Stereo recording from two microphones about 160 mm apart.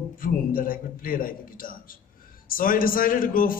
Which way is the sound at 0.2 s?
60° left (ahead or behind).